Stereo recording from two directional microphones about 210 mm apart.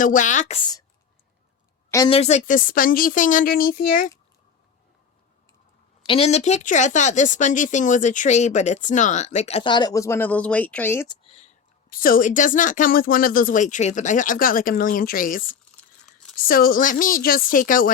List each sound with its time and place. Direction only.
0.0 s speech: 40° left (ahead or behind)
2.0 s speech: 30° left (ahead or behind)
6.1 s speech: 30° left (ahead or behind); by 11.2 s 10° left (ahead or behind)
11.2 s speech: 30° left (ahead or behind)
16.5 s speech: 45° left (ahead or behind)